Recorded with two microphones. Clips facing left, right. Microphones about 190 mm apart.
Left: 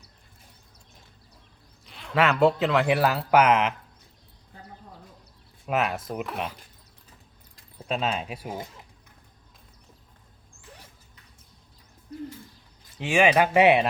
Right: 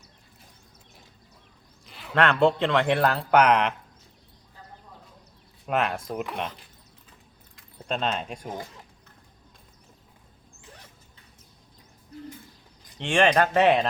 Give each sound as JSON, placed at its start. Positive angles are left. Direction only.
{"t": 1.8, "sound": "speech", "side_deg": 0}
{"t": 5.6, "sound": "speech", "side_deg": 5}
{"t": 7.8, "sound": "speech", "side_deg": 5}
{"t": 13.0, "sound": "speech", "side_deg": 5}